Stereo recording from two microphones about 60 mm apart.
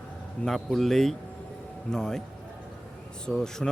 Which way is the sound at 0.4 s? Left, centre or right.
Centre.